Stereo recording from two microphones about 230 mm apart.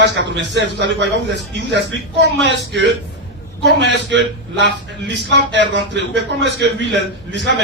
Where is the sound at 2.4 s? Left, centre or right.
Right.